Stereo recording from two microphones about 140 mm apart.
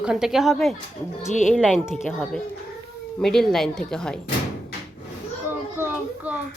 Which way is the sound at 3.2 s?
5° left (ahead or behind).